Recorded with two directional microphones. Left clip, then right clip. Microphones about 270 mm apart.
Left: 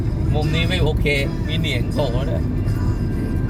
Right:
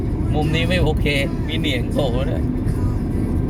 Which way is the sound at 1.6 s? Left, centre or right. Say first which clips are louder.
Right 2 dB; centre.